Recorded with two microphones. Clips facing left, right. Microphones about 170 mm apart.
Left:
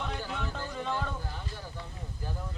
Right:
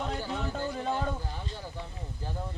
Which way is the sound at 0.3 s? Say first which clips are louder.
Right 4 dB; 35° right (ahead or behind).